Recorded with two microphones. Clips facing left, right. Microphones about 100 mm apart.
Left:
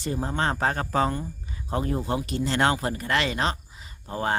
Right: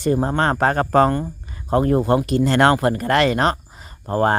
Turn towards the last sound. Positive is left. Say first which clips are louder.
# right 10 dB
turn(degrees=-50)  # may be behind; listen again after turning